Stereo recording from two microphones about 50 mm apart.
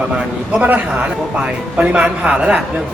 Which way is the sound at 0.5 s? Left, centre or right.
Right.